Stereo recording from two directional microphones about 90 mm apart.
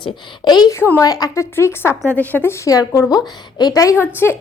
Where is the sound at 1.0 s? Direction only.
45° left (ahead or behind).